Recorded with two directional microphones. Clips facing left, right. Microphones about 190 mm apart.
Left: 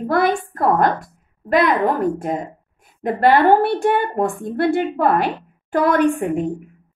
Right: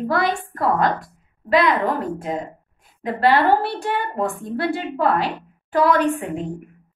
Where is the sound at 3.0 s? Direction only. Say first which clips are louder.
Left 3 dB; 50° left (ahead or behind).